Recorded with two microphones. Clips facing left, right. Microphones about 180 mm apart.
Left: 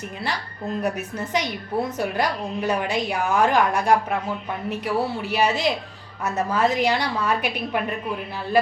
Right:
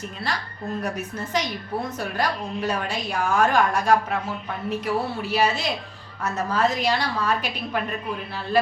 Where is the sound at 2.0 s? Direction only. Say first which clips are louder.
Left 2 dB; 15° left (ahead or behind).